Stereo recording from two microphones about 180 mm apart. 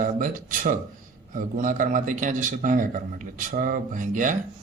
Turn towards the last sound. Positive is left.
turn(degrees=-45)  # may be behind; listen again after turning